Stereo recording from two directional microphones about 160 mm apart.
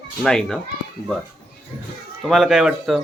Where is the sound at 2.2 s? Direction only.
Centre (ahead or behind).